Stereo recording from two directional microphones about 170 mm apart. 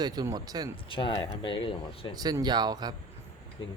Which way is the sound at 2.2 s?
25° right (ahead or behind).